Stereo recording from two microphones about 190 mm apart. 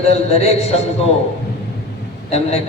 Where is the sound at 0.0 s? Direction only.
30° left (ahead or behind).